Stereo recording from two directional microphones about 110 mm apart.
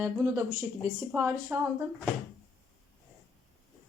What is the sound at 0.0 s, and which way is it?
A man's voice, 25° right (ahead or behind).